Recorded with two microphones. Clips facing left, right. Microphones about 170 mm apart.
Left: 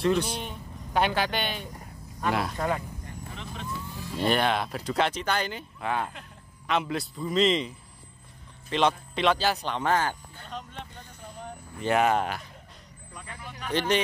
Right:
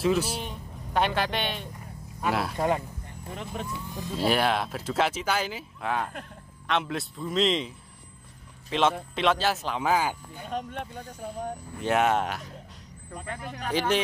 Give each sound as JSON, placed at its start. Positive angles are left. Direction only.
{"t": 0.0, "sound": "speech", "side_deg": -5}
{"t": 2.5, "sound": "speech", "side_deg": -20}
{"t": 3.9, "sound": "police car", "side_deg": -20}
{"t": 4.2, "sound": "a man's voice", "side_deg": -5}
{"t": 10.5, "sound": "speech", "side_deg": -50}
{"t": 11.8, "sound": "speech", "side_deg": 0}
{"t": 13.3, "sound": "speech", "side_deg": -50}